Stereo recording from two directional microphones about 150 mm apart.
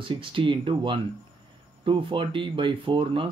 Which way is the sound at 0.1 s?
35° right (ahead or behind).